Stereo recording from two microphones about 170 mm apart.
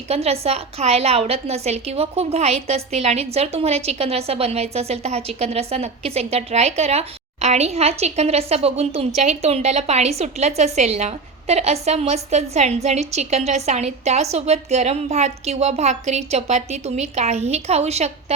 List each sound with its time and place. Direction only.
0.1 s a woman's voice: 35° right (ahead or behind)